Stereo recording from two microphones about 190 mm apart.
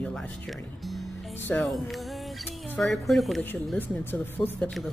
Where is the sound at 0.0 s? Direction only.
5° left (ahead or behind).